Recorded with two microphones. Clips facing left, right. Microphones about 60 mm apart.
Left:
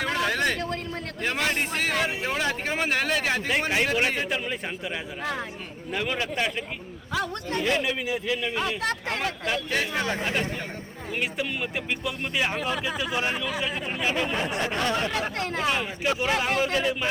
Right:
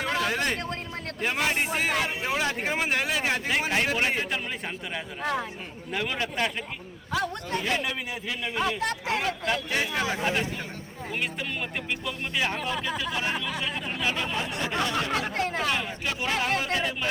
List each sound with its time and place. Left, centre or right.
0.0 s a sound: centre
1.2 s a man's voice: centre
9.6 s a man's voice: centre
14.0 s speech: centre
14.4 s speech: left
15.4 s a man's voice: centre
15.6 s a man's voice: centre